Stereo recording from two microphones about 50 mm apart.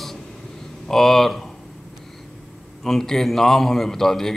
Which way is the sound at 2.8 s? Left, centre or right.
Centre.